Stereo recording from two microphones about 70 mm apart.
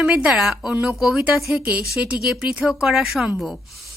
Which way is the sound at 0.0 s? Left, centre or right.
Centre.